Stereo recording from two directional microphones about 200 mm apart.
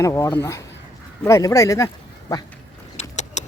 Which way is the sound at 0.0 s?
15° left (ahead or behind).